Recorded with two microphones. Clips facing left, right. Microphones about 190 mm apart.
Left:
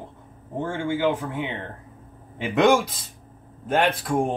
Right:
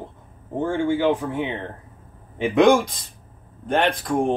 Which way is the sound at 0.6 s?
Centre (ahead or behind).